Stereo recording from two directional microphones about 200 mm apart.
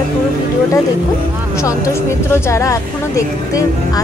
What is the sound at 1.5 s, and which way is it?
Speech, 15° left (ahead or behind).